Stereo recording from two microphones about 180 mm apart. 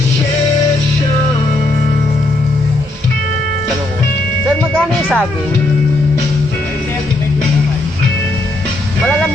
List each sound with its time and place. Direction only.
5.0 s speech: 5° left (ahead or behind)